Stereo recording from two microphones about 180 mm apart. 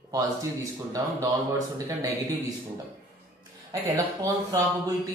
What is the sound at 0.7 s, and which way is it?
Speech, 20° right (ahead or behind).